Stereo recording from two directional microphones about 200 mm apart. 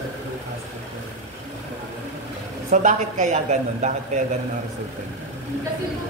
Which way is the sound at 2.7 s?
35° right (ahead or behind).